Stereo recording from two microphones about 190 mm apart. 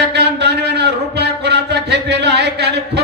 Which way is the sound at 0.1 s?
60° right (ahead or behind).